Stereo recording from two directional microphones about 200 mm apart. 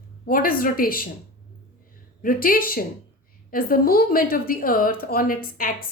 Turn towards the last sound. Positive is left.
turn(degrees=45)  # may be behind; listen again after turning